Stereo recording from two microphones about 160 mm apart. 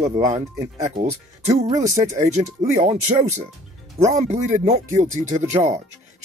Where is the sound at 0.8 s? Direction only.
45° right (ahead or behind).